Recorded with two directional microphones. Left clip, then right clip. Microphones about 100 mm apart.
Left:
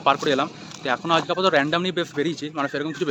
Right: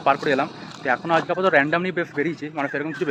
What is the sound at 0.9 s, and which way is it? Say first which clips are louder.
Speech: right 1 dB; 35° left (ahead or behind).